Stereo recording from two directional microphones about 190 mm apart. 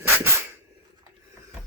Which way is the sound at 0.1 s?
10° right (ahead or behind).